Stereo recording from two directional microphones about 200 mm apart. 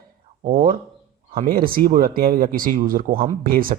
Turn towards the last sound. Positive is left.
turn(degrees=-45)  # may be behind; listen again after turning